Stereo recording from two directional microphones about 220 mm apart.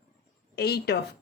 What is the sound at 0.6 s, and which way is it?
Speech, 45° left (ahead or behind).